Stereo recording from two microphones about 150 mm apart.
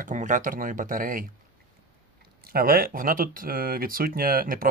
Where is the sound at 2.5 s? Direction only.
75° right (ahead or behind).